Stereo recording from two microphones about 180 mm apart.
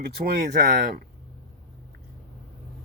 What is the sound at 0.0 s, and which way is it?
Speech, 55° right (ahead or behind).